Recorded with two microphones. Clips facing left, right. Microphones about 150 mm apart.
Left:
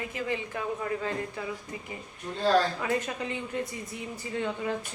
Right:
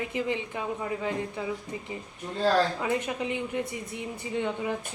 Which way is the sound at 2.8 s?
20° right (ahead or behind).